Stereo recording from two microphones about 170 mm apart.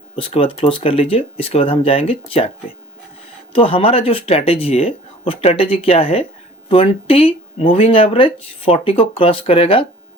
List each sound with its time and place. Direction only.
0.2 s speech: 35° left (ahead or behind)